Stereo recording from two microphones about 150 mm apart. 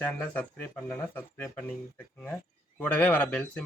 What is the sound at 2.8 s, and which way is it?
Speech, 10° left (ahead or behind).